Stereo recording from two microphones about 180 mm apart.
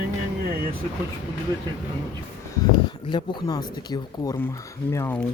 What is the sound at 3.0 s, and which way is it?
Speech, 25° left (ahead or behind).